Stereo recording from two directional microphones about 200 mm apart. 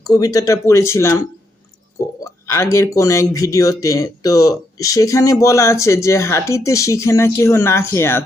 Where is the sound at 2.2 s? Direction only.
15° left (ahead or behind).